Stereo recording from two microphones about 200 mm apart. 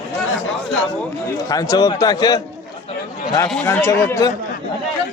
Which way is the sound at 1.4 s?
20° left (ahead or behind).